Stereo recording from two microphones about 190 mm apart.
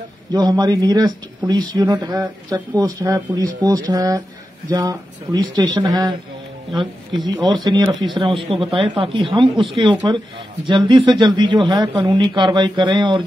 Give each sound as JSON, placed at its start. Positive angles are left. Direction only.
{"t": 0.3, "sound": "speech", "side_deg": -20}